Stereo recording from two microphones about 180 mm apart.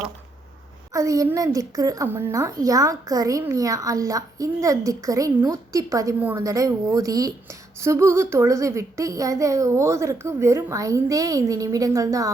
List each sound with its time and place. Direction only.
0.9 s a woman's voice: 20° right (ahead or behind)